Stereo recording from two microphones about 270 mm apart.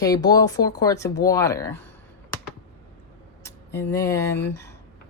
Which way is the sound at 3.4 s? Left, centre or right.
Centre.